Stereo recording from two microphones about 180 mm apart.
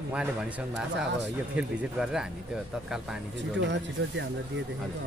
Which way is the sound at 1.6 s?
5° right (ahead or behind).